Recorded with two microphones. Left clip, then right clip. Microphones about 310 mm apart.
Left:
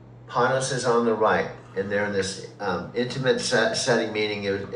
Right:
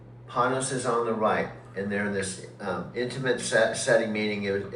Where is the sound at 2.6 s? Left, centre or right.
Left.